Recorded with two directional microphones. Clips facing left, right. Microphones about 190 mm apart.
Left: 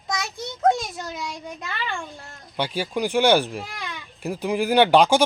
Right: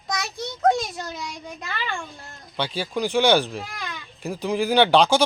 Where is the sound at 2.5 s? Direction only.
10° left (ahead or behind).